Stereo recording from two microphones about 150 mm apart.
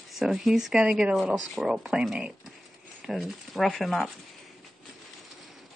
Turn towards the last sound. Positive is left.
turn(degrees=0)  # may be behind; listen again after turning